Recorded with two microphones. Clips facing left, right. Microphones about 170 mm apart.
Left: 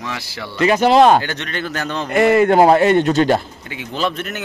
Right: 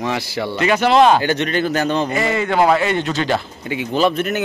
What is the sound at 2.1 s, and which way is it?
Speech, 60° left (ahead or behind).